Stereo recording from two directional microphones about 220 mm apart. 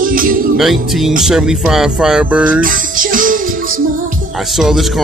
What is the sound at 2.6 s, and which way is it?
Music, 40° right (ahead or behind).